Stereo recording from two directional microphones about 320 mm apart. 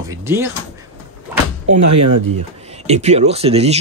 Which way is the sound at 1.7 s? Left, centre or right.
Right.